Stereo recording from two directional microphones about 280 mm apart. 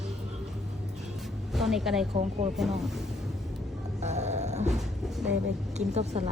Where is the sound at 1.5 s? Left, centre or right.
Centre.